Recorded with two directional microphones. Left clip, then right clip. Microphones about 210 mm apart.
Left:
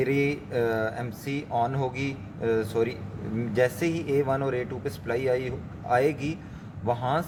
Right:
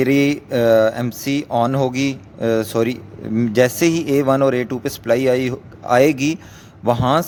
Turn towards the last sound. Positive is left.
turn(degrees=-50)  # may be behind; listen again after turning